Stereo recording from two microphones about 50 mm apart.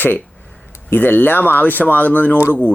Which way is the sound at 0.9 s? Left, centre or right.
Left.